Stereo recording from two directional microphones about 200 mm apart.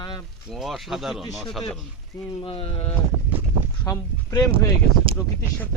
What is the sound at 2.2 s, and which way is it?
Speech, 30° left (ahead or behind).